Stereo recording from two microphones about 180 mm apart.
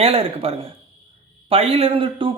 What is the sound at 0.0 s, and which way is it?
Speech, 35° right (ahead or behind).